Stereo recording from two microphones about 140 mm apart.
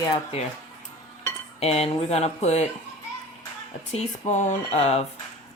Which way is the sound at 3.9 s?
55° left (ahead or behind).